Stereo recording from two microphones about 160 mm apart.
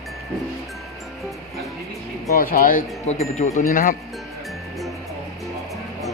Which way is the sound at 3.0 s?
45° left (ahead or behind).